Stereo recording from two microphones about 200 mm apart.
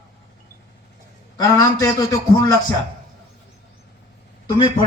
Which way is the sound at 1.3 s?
20° left (ahead or behind).